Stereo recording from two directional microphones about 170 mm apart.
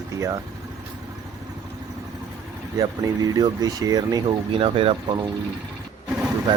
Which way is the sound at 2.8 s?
20° right (ahead or behind).